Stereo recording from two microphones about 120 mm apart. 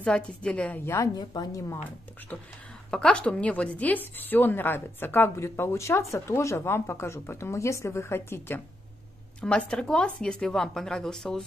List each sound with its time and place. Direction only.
0.0 s a woman's voice: 10° left (ahead or behind)
0.8 s a woman's voice: 25° left (ahead or behind)
2.9 s a woman's voice: 10° left (ahead or behind)
9.4 s speech: 10° left (ahead or behind)